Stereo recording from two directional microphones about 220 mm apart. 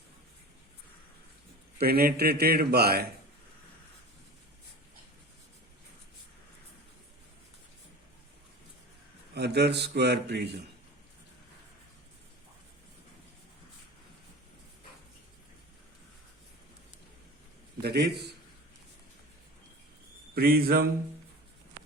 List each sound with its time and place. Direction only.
1.8 s a man's voice: 45° right (ahead or behind)
9.3 s a man's voice: 50° right (ahead or behind)
17.8 s a man's voice: 50° right (ahead or behind)
20.3 s a man's voice: 45° right (ahead or behind)